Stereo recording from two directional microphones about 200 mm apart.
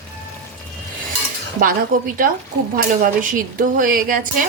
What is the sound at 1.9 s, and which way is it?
Speech, 40° right (ahead or behind).